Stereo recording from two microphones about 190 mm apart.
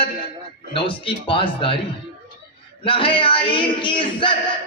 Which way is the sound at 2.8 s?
25° left (ahead or behind).